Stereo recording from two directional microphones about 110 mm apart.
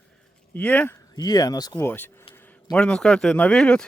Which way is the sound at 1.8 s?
15° left (ahead or behind).